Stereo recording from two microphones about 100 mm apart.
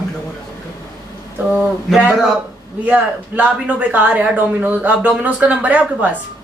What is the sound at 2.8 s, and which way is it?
Speech, 15° right (ahead or behind).